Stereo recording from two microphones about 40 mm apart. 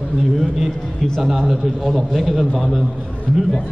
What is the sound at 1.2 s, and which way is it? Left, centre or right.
A man's voice, centre.